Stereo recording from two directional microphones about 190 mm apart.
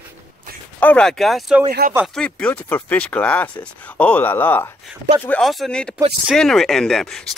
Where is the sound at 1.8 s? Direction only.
55° right (ahead or behind).